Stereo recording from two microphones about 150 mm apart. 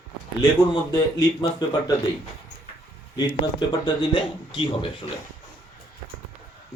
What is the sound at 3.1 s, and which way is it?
Speech, 30° left (ahead or behind).